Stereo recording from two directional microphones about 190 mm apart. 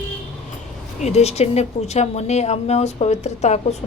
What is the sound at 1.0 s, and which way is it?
A woman's voice, 35° left (ahead or behind).